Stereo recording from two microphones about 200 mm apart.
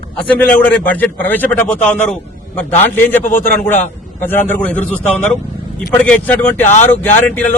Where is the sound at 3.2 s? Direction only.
40° left (ahead or behind).